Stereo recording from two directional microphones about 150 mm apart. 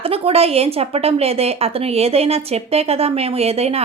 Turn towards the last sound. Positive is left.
turn(degrees=-40)  # may be behind; listen again after turning